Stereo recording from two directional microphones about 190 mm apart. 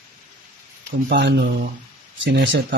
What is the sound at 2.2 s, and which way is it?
Speech, 75° right (ahead or behind).